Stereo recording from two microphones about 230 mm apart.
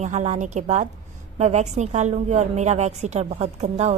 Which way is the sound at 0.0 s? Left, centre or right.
Right.